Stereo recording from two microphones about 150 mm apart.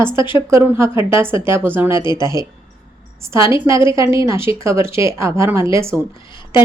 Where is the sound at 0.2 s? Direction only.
35° left (ahead or behind).